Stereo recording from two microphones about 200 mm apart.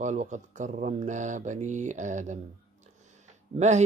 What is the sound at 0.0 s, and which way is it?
Speech, 35° right (ahead or behind).